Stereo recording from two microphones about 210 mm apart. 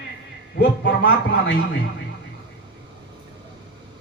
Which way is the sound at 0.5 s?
50° left (ahead or behind).